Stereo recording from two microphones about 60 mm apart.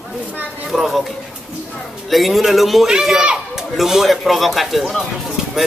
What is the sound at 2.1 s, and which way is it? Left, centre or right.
Speech, centre.